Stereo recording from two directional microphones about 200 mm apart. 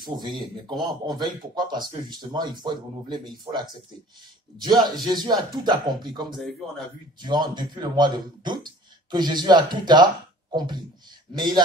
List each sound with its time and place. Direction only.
0.0 s speech: 20° right (ahead or behind)
6.3 s speech: centre (ahead or behind)
7.2 s speech: 20° right (ahead or behind)